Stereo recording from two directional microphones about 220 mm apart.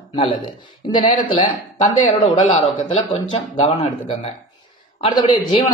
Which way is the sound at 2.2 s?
25° left (ahead or behind).